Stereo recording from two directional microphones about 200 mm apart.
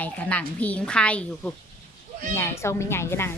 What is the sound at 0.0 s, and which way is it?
A woman's voice, 5° left (ahead or behind).